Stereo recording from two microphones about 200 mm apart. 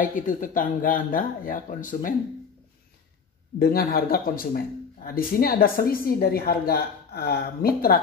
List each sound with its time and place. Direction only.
0.0 s speech: 40° left (ahead or behind)
3.5 s speech: 50° left (ahead or behind)